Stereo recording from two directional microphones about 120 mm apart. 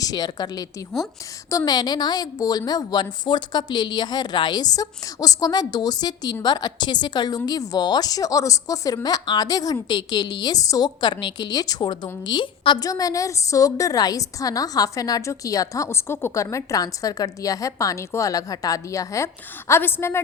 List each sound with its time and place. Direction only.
0.0 s a woman's voice: 35° left (ahead or behind)